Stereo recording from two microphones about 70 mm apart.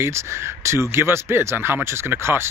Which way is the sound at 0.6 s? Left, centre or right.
Right.